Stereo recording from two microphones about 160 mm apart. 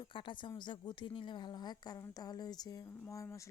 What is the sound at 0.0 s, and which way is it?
A woman's voice, 30° left (ahead or behind).